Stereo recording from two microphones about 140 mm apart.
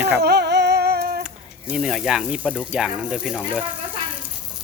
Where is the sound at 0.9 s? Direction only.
90° right.